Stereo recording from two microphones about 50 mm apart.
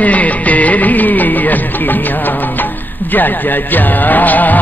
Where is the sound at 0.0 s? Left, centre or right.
Left.